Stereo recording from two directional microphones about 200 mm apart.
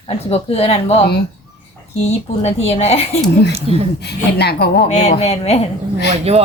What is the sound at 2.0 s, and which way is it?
Speech, 30° left (ahead or behind).